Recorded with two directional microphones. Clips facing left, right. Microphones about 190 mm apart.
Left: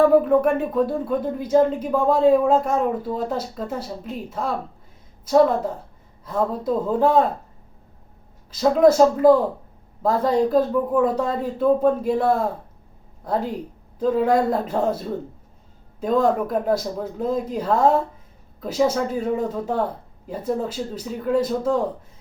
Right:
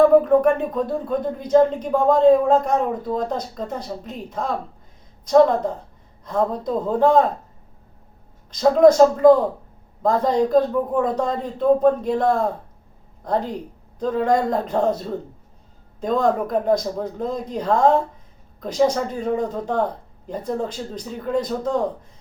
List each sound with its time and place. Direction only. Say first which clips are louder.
0.4 s speech: even; 5° left (ahead or behind)
8.4 s speech: right 2 dB; 5° left (ahead or behind)